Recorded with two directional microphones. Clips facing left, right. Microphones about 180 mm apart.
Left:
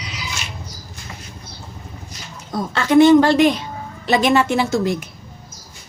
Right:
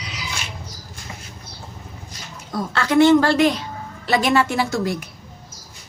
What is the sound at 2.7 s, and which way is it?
A woman's voice, 20° left (ahead or behind).